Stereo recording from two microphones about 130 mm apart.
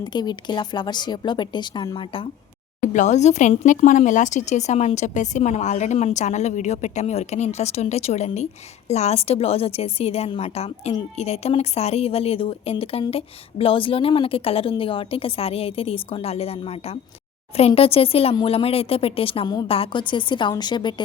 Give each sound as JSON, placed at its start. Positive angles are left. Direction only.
{"t": 0.0, "sound": "a woman's voice", "side_deg": 35}
{"t": 2.9, "sound": "a woman's voice", "side_deg": 65}